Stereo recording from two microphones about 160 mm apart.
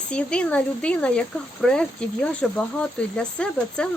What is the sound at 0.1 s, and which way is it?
Speech, 5° left (ahead or behind).